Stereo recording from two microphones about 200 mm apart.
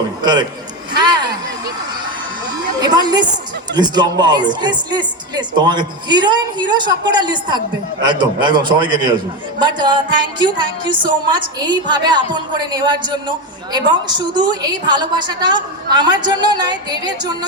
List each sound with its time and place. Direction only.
0.2 s a man's voice: 20° right (ahead or behind)
0.9 s a sound: 20° right (ahead or behind)
2.8 s speech: 20° right (ahead or behind)